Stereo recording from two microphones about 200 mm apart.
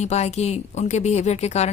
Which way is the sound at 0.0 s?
35° left (ahead or behind).